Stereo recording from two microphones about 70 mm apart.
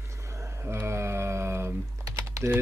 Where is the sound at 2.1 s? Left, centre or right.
Right.